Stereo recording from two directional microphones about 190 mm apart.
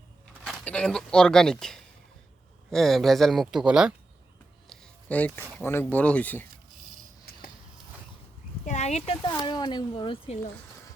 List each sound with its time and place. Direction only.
0.6 s speech: 5° left (ahead or behind)
8.6 s a sound: 35° left (ahead or behind)
9.2 s speech: 20° left (ahead or behind)